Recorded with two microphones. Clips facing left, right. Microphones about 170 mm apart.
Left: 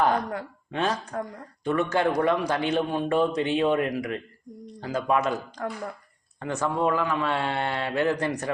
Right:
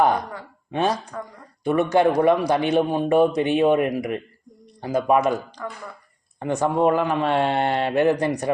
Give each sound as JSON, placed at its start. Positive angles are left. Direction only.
{"t": 0.0, "sound": "speech", "side_deg": -10}
{"t": 6.4, "sound": "a man's voice", "side_deg": -15}